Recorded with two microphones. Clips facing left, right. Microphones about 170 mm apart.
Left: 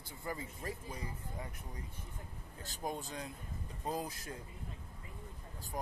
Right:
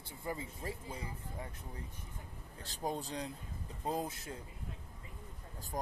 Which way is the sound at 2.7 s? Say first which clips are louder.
Right 2 dB; 35° right (ahead or behind).